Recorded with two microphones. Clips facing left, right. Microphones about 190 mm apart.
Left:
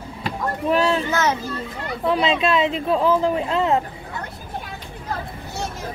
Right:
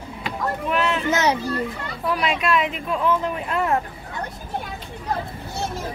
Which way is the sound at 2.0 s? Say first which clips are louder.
Left 3 dB; 25° left (ahead or behind).